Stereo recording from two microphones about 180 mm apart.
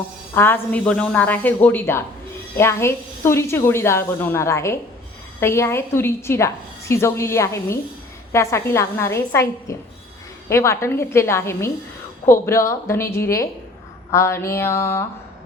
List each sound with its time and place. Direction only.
0.3 s a woman's voice: 10° left (ahead or behind)